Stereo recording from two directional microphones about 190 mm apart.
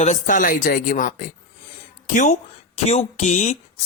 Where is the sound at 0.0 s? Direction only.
40° left (ahead or behind).